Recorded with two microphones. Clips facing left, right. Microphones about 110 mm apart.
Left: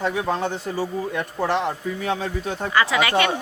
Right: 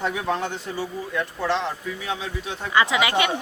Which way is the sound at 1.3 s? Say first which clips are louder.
Left 4 dB; 50° left (ahead or behind).